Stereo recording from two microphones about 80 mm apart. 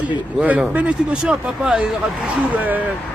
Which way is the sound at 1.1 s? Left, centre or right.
Centre.